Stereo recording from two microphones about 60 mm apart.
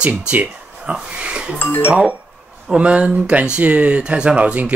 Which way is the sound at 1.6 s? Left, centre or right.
Left.